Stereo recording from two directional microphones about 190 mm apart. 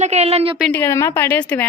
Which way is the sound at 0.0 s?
35° right (ahead or behind).